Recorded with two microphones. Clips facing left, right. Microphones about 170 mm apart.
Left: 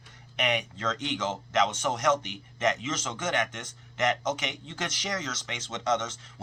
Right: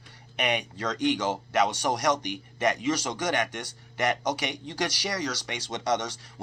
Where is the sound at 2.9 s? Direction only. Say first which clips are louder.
Right 4 dB; 35° right (ahead or behind).